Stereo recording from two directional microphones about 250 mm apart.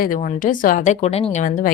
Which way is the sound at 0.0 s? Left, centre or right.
Left.